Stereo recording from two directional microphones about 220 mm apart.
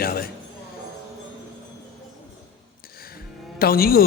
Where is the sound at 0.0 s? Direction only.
40° left (ahead or behind).